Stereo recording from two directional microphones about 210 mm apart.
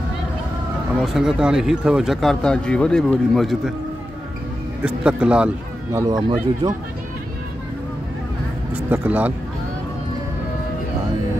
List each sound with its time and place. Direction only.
1.0 s speech: centre (ahead or behind)
4.8 s speech: 5° right (ahead or behind)
5.9 s speech: 20° right (ahead or behind)
8.9 s speech: 10° right (ahead or behind)